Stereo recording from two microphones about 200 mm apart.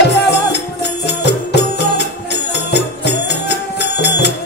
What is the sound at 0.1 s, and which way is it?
Music, 55° left (ahead or behind).